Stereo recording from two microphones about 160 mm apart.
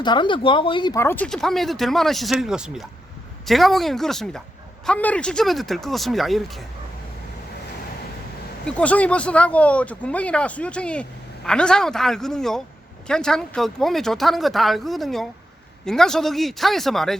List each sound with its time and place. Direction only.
0.0 s speech: 30° left (ahead or behind)
0.9 s speech: 10° left (ahead or behind)
8.6 s speech: 10° left (ahead or behind)